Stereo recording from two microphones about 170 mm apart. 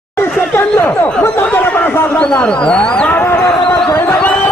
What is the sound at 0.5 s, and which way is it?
Speech, 10° left (ahead or behind).